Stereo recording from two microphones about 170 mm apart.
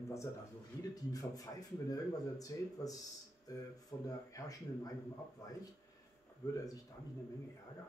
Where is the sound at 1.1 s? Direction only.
20° left (ahead or behind).